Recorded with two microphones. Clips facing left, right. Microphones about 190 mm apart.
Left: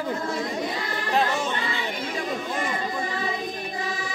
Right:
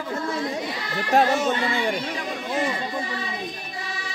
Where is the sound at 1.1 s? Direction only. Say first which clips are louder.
Right 5 dB; 45° right (ahead or behind).